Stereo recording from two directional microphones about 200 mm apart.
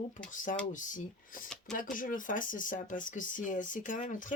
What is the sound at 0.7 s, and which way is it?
Speech, 40° left (ahead or behind).